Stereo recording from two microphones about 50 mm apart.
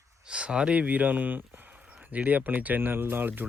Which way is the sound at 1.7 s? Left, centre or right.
Right.